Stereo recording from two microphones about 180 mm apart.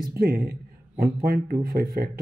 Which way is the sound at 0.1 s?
60° right (ahead or behind).